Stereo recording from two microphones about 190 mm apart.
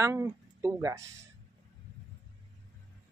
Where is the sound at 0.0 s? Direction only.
15° right (ahead or behind).